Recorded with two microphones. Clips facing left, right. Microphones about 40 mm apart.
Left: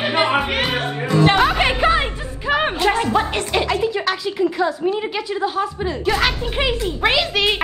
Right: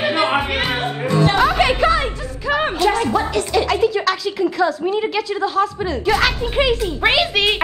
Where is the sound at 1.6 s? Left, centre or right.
Centre; by 3.6 s left.